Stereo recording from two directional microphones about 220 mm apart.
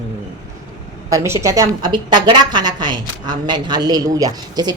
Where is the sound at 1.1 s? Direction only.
15° right (ahead or behind).